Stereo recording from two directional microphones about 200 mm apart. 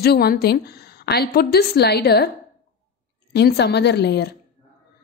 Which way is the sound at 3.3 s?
55° left (ahead or behind).